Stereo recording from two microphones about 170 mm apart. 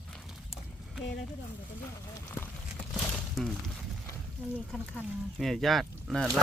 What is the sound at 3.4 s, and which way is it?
Speech, centre (ahead or behind).